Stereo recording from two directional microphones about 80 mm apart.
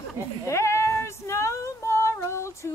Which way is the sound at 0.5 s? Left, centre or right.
Left.